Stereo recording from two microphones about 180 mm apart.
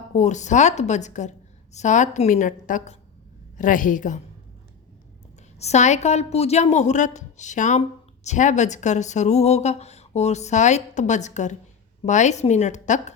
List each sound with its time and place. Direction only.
0.2 s a woman's voice: 40° left (ahead or behind)
5.5 s speech: 40° left (ahead or behind)